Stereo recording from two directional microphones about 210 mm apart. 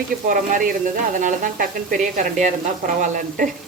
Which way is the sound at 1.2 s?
40° right (ahead or behind).